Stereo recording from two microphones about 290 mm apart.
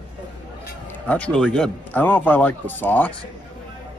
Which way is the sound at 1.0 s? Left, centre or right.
Centre.